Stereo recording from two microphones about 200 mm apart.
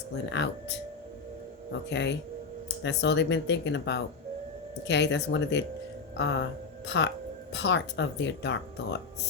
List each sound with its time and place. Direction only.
0.3 s speech: 60° left (ahead or behind)
1.9 s speech: 60° left (ahead or behind)